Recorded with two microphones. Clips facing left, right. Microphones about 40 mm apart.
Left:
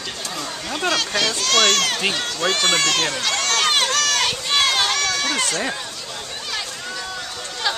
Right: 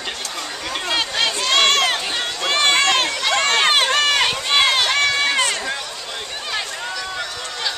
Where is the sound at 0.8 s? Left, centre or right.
Centre.